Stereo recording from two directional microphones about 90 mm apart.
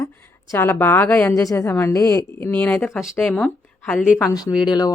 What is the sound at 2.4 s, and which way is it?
Speech, 20° left (ahead or behind).